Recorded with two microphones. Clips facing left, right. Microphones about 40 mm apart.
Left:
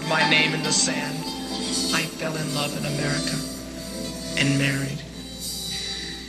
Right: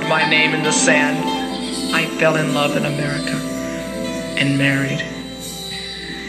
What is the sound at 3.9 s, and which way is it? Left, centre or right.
Music, right.